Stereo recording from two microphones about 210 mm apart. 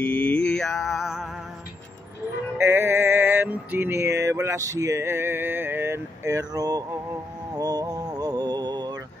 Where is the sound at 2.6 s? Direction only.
10° right (ahead or behind).